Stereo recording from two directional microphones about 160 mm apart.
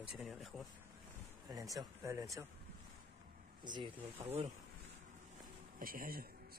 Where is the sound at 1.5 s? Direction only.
20° right (ahead or behind).